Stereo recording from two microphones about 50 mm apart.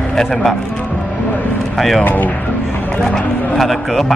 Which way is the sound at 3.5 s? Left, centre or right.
Centre.